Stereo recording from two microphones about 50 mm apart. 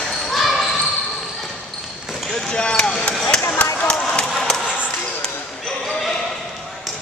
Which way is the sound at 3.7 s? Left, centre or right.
Centre.